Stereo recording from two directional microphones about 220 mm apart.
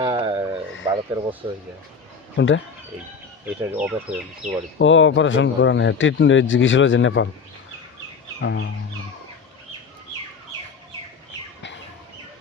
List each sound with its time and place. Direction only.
0.0 s a sound: 20° right (ahead or behind)
0.9 s speech: 15° right (ahead or behind)
2.4 s a man's voice: 55° left (ahead or behind)
3.4 s speech: 10° right (ahead or behind)
4.4 s speech: 35° right (ahead or behind)
4.8 s a man's voice: 60° left (ahead or behind)
8.4 s music: 55° left (ahead or behind)